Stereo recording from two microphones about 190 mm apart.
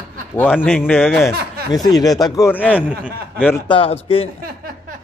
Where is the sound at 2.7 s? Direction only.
5° right (ahead or behind).